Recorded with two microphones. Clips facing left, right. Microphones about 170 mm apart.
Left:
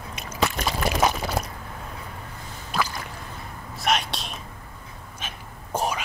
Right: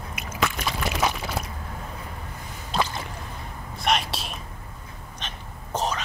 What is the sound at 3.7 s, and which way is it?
Whispering, centre (ahead or behind).